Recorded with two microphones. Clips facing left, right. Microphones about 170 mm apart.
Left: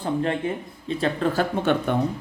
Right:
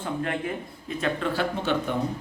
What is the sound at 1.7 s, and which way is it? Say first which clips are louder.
Speech: left 4 dB; 55° left (ahead or behind).